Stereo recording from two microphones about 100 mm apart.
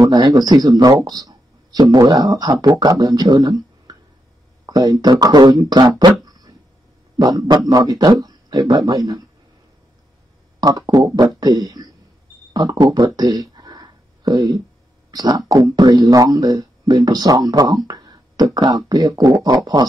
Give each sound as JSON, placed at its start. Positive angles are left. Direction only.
{"t": 0.0, "sound": "speech", "side_deg": -45}
{"t": 6.2, "sound": "a sound", "side_deg": -40}
{"t": 7.2, "sound": "speech", "side_deg": -40}
{"t": 10.9, "sound": "speech", "side_deg": -40}
{"t": 12.5, "sound": "a sound", "side_deg": -40}
{"t": 15.0, "sound": "speech", "side_deg": -40}